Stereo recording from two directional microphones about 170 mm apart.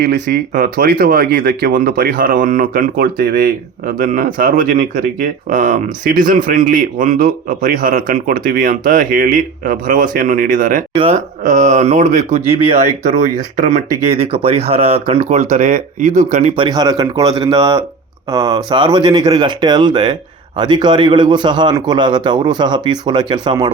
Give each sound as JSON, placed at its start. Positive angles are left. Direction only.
{"t": 0.0, "sound": "speech", "side_deg": -65}
{"t": 10.9, "sound": "speech", "side_deg": -35}
{"t": 11.4, "sound": "speech", "side_deg": -45}
{"t": 16.6, "sound": "a man's voice", "side_deg": -25}